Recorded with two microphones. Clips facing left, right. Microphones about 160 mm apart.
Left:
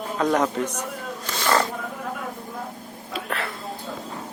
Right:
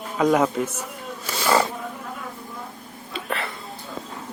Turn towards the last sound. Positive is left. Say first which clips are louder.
# even
turn(degrees=0)  # may be behind; listen again after turning